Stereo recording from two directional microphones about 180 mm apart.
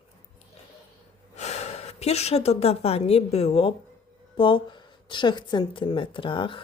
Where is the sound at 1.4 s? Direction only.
40° left (ahead or behind).